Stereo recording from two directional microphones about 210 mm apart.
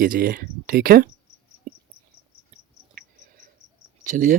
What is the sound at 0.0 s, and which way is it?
Speech, 40° right (ahead or behind).